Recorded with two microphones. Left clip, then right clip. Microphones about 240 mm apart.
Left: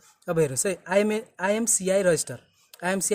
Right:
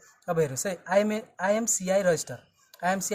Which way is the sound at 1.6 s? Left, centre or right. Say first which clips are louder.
Left 2 dB; left.